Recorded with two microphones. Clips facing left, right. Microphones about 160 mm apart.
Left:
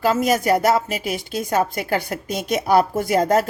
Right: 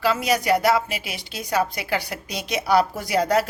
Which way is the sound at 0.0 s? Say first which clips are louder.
Left 3 dB; 45° left (ahead or behind).